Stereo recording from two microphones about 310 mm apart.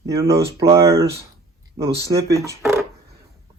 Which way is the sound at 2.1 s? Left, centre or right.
Centre.